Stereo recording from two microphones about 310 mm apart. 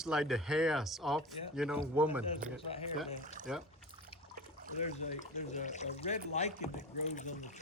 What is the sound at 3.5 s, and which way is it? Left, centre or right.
Speech, centre.